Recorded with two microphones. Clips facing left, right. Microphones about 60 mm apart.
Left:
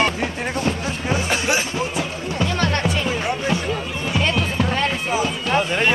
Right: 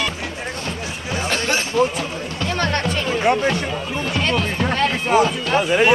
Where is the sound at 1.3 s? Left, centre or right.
Centre.